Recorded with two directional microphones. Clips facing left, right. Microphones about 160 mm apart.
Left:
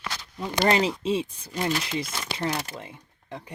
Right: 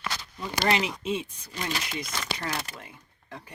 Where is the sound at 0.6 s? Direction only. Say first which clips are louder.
Left 4 dB; 35° left (ahead or behind).